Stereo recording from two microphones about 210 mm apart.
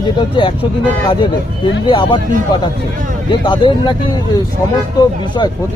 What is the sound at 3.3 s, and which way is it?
Speech, 20° left (ahead or behind).